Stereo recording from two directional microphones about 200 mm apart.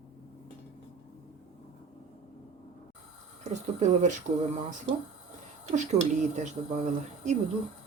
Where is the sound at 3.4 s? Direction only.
35° right (ahead or behind).